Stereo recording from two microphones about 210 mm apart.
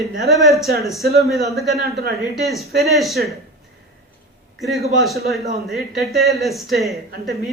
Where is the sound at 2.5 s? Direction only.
Centre (ahead or behind).